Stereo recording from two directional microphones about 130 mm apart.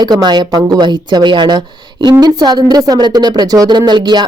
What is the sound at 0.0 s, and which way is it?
A woman's voice, 30° right (ahead or behind).